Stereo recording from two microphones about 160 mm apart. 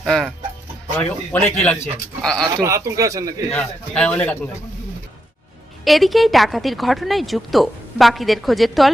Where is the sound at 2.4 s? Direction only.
25° right (ahead or behind).